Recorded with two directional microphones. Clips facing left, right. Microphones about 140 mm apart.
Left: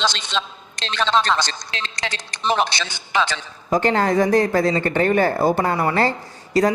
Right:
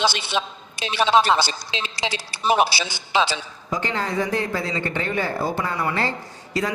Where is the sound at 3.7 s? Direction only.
50° left (ahead or behind).